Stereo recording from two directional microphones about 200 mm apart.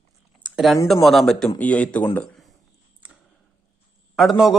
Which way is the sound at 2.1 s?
5° left (ahead or behind).